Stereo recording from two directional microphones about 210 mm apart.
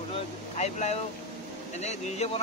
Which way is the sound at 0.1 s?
30° left (ahead or behind).